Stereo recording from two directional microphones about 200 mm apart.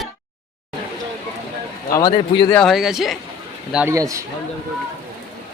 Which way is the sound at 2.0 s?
25° left (ahead or behind).